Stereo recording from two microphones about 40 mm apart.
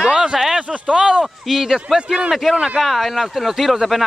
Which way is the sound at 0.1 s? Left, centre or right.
Centre.